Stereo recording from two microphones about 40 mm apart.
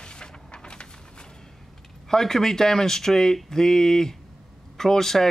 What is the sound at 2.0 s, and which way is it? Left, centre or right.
Speech, centre.